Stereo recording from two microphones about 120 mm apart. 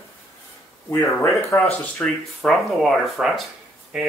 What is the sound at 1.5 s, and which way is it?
Speech, 15° left (ahead or behind).